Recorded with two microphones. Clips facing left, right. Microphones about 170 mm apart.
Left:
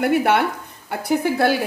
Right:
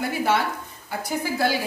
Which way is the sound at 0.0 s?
65° left (ahead or behind).